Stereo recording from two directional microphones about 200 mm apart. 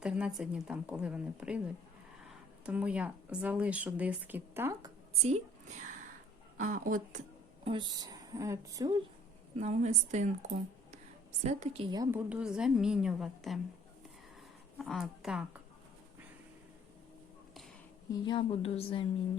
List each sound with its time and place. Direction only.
0.0 s a woman's voice: 5° right (ahead or behind)
5.2 s a woman's voice: 35° right (ahead or behind)
7.6 s speech: 25° right (ahead or behind)
9.6 s a woman's voice: 35° right (ahead or behind)
11.4 s speech: 30° right (ahead or behind)
12.3 s a woman's voice: 5° right (ahead or behind)
14.8 s a woman's voice: centre (ahead or behind)
18.1 s a woman's voice: 25° left (ahead or behind)